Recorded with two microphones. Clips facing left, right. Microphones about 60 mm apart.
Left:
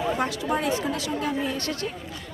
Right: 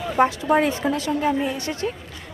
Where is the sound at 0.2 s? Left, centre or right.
Right.